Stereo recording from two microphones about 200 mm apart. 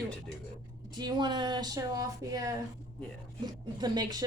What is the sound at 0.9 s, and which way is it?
Speech, 20° right (ahead or behind).